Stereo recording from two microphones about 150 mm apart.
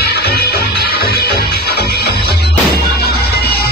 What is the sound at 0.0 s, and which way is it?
Music, 90° left.